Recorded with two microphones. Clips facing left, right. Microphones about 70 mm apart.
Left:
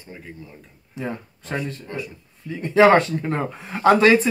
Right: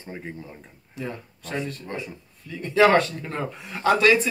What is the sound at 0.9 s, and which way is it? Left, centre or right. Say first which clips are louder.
Speech: left 4 dB; left.